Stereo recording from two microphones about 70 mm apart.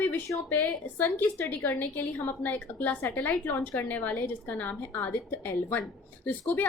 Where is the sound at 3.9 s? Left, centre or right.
Left.